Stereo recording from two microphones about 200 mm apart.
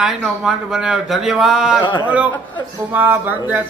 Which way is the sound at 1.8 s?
20° left (ahead or behind).